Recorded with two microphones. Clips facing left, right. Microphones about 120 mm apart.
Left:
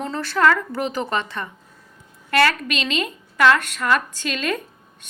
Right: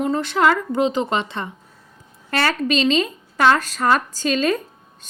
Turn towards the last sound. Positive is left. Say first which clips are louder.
# right 6 dB
turn(degrees=-35)  # may be behind; listen again after turning